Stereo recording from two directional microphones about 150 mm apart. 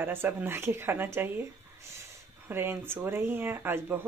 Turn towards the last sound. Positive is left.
turn(degrees=-15)  # may be behind; listen again after turning